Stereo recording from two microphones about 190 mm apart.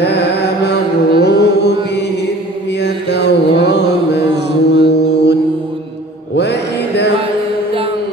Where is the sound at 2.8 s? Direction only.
65° left (ahead or behind).